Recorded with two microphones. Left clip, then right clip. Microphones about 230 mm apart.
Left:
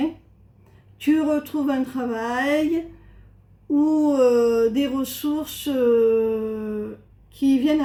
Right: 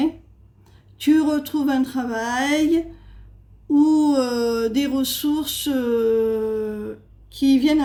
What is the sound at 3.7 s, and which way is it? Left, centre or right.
A woman's voice, right.